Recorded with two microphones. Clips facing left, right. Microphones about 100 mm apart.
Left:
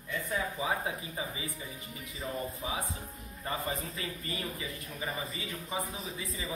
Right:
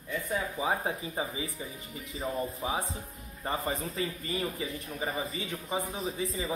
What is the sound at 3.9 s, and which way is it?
A man's voice, 30° right (ahead or behind).